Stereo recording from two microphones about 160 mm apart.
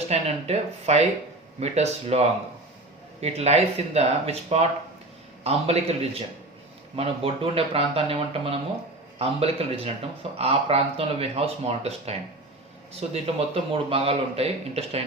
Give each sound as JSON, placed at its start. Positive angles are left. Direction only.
{"t": 0.1, "sound": "a man's voice", "side_deg": -40}